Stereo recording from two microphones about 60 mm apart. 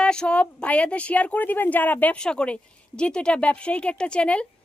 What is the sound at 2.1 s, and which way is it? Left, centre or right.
A woman's voice, centre.